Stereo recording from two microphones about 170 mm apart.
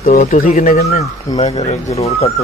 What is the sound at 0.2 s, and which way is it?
A man's voice, 50° left (ahead or behind).